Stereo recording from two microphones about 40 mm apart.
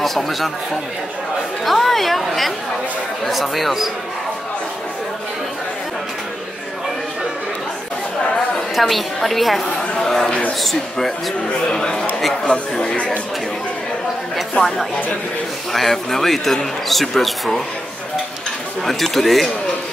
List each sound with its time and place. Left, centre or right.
0.0 s speech: centre
1.6 s a woman's voice: centre
8.7 s a woman's voice: centre
11.7 s speech: centre
15.7 s a woman's voice: centre
18.9 s a woman's voice: centre